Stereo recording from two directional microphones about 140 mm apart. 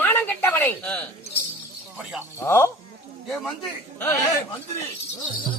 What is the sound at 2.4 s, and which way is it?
Speech, 15° left (ahead or behind).